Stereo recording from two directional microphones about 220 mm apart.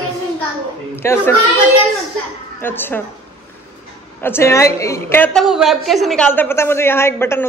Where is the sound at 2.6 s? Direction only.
10° left (ahead or behind).